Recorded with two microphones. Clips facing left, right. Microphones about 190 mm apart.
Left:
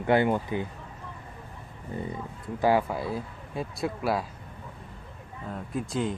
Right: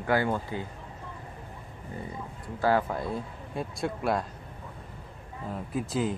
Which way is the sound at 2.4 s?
15° left (ahead or behind).